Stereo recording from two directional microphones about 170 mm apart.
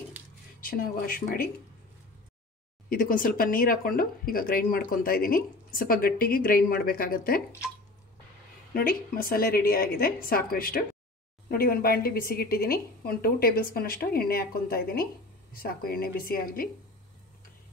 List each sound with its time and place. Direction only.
0.6 s speech: 60° left (ahead or behind)
2.9 s speech: 55° left (ahead or behind)
8.7 s speech: 60° left (ahead or behind)